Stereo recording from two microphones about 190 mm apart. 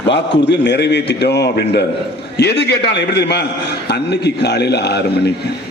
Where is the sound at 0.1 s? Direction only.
65° left (ahead or behind).